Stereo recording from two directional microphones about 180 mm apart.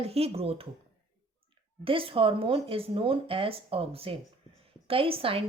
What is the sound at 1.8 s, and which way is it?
Speech, 30° right (ahead or behind).